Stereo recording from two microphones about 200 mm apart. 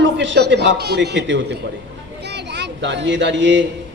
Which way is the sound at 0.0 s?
65° right (ahead or behind).